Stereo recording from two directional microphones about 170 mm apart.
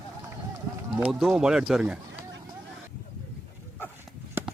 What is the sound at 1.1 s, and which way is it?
Speech, centre (ahead or behind).